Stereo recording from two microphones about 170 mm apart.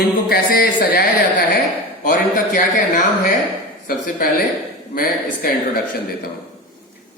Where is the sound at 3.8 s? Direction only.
60° left (ahead or behind).